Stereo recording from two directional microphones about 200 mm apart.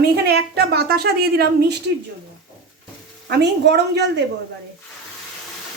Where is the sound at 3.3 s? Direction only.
55° right (ahead or behind).